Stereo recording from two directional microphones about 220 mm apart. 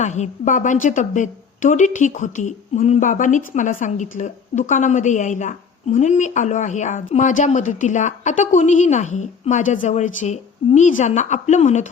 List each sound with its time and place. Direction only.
0.0 s a woman's voice: 30° left (ahead or behind)